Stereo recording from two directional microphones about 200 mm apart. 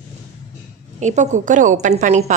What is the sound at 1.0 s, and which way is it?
A woman's voice, 35° right (ahead or behind).